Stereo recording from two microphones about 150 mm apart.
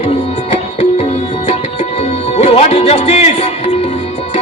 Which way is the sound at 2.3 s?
45° left (ahead or behind).